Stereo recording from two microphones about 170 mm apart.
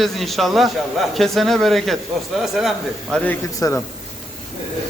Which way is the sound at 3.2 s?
15° left (ahead or behind).